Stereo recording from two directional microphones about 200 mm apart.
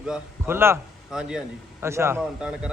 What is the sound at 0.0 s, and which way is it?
A man's voice, 10° right (ahead or behind).